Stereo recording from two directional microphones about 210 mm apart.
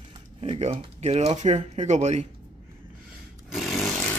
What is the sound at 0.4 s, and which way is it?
Speech, 30° right (ahead or behind).